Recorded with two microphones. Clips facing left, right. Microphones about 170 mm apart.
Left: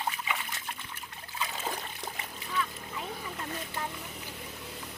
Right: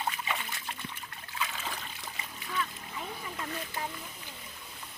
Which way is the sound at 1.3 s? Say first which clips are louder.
Even; 30° left (ahead or behind).